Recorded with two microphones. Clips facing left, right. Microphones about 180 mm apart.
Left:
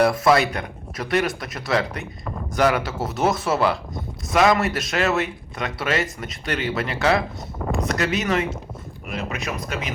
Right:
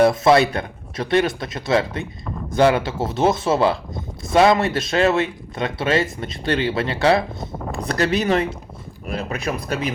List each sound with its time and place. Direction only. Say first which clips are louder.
0.0 s speech: right 3 dB; 25° right (ahead or behind)